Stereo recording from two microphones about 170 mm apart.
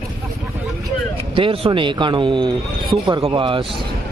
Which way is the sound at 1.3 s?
30° right (ahead or behind).